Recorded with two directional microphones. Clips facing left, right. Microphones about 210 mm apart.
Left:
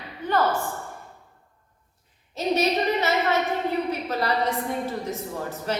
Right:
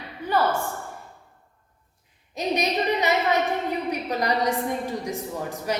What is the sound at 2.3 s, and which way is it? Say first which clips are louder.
A man's voice: left 2 dB; 15° right (ahead or behind).